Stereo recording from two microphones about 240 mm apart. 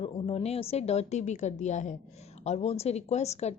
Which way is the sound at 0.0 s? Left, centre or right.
Left.